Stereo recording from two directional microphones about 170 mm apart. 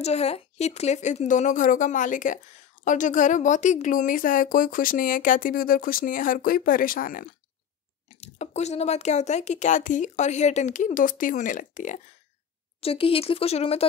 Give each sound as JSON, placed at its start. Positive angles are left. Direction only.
{"t": 0.0, "sound": "a woman's voice", "side_deg": 40}
{"t": 8.1, "sound": "a woman's voice", "side_deg": 40}
{"t": 12.8, "sound": "speech", "side_deg": 35}